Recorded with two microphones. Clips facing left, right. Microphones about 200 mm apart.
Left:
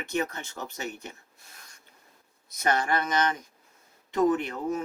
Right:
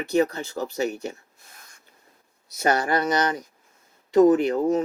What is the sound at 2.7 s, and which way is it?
Speech, 35° right (ahead or behind).